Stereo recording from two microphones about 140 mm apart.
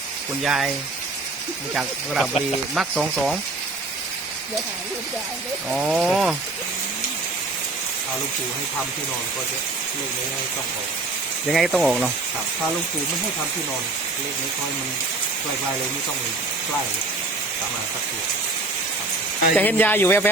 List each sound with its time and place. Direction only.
0.4 s speech: 5° right (ahead or behind)
1.7 s speech: 5° right (ahead or behind)
5.7 s speech: 5° right (ahead or behind)
11.5 s speech: centre (ahead or behind)
19.5 s speech: 15° left (ahead or behind)